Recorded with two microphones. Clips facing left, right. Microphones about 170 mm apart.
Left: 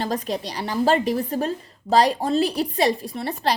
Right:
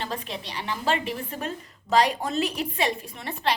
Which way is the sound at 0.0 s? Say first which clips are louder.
Left 7 dB; 40° left (ahead or behind).